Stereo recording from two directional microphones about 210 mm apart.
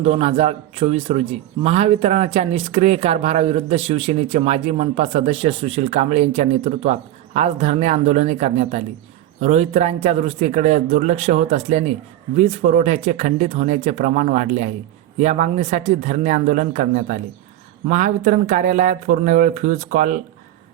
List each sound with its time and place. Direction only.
0.0 s a man's voice: 30° right (ahead or behind)